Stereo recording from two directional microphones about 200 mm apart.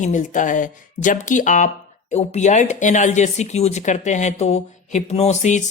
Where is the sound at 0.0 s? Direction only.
40° left (ahead or behind).